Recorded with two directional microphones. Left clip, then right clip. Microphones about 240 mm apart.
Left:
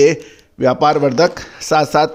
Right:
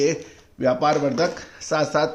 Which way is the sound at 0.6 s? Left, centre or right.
Left.